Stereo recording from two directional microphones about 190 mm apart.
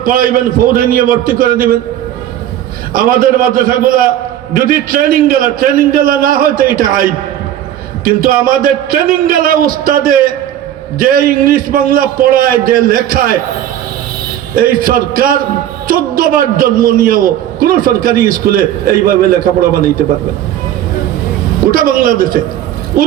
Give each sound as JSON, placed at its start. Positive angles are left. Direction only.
{"t": 0.0, "sound": "a man's voice", "side_deg": -50}
{"t": 2.9, "sound": "a man's voice", "side_deg": -50}
{"t": 14.5, "sound": "a man's voice", "side_deg": -50}
{"t": 21.7, "sound": "a man's voice", "side_deg": -50}